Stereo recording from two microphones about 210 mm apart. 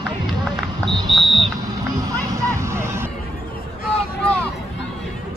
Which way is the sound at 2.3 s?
15° right (ahead or behind).